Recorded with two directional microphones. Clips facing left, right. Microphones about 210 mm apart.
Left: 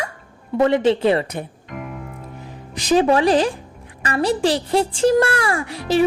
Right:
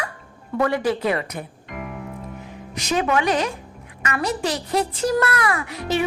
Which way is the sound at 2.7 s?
30° left (ahead or behind).